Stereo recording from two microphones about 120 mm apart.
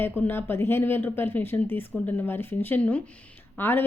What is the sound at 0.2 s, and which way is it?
A woman's voice, 15° left (ahead or behind).